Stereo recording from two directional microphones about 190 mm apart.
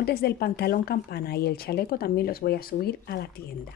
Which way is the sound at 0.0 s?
55° left (ahead or behind).